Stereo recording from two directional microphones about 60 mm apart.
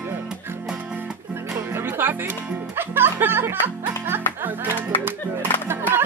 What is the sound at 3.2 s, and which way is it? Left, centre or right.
Speech, right.